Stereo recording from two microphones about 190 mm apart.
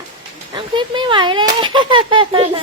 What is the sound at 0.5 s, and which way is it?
Speech, 25° right (ahead or behind).